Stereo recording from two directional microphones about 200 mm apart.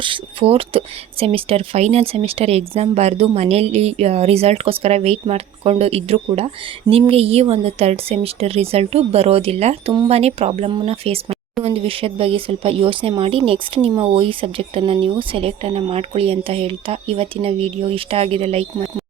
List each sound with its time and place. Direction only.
0.0 s speech: 25° right (ahead or behind)